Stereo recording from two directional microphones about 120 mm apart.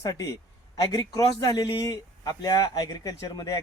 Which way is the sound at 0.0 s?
30° left (ahead or behind).